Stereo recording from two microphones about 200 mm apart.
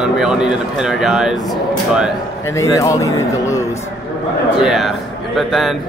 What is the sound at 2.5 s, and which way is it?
A man's voice, 15° left (ahead or behind).